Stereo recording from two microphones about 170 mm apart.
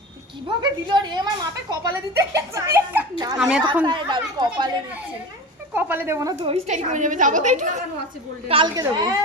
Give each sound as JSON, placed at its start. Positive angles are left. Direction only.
{"t": 0.4, "sound": "a child's voice", "side_deg": -25}
{"t": 3.8, "sound": "speech", "side_deg": -30}
{"t": 5.7, "sound": "speech", "side_deg": -10}
{"t": 6.4, "sound": "a woman's voice", "side_deg": -40}
{"t": 8.4, "sound": "speech", "side_deg": -30}